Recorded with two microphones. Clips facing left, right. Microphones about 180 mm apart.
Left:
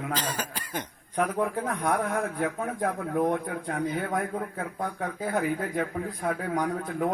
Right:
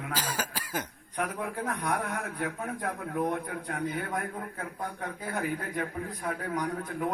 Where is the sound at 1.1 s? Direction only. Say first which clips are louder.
Left 6 dB; 50° left (ahead or behind).